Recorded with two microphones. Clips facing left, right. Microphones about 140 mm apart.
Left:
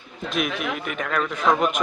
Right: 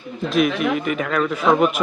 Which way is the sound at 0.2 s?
Centre (ahead or behind).